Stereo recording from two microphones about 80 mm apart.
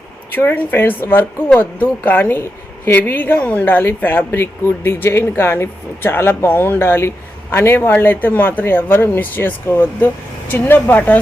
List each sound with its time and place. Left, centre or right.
0.3 s speech: left